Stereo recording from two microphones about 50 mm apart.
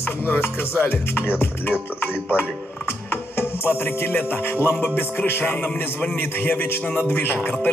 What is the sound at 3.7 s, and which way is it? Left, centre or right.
Music, left.